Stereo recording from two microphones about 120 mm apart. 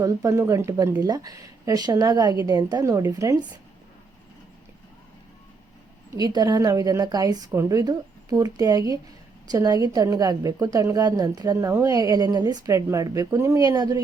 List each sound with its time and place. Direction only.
0.0 s a woman's voice: 25° right (ahead or behind)
6.1 s a woman's voice: 35° right (ahead or behind)